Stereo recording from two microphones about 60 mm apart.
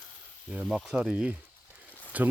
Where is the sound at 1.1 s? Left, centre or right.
Right.